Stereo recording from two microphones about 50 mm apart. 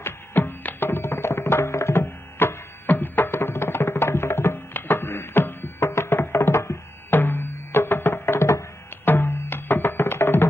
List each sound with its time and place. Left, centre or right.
0.0 s tabla: left
2.0 s music: left
7.1 s music: left